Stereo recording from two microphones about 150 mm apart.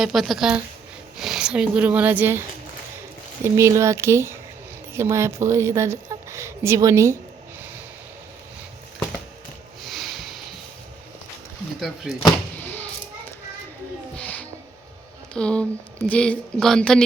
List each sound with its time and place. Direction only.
0.0 s a woman's voice: centre (ahead or behind)
3.4 s a woman's voice: 20° right (ahead or behind)
9.8 s a sound: centre (ahead or behind)
12.1 s a woman's voice: 5° right (ahead or behind)
12.6 s a sound: 10° left (ahead or behind)
14.2 s music: 10° left (ahead or behind)
15.3 s a woman's voice: 5° left (ahead or behind)